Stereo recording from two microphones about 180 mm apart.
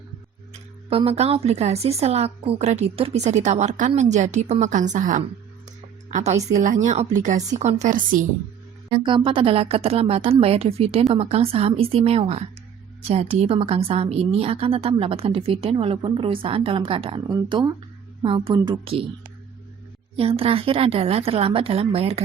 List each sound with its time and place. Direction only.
0.9 s a woman's voice: 35° right (ahead or behind)
8.9 s a woman's voice: 25° right (ahead or behind)
20.1 s a woman's voice: 35° right (ahead or behind)